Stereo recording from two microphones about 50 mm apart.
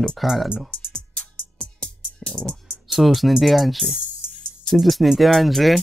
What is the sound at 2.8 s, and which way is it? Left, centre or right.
Speech, centre.